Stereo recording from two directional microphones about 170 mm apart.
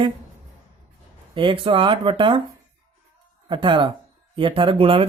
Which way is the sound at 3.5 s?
30° right (ahead or behind).